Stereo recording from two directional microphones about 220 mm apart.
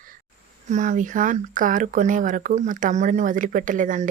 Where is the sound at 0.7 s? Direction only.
35° right (ahead or behind).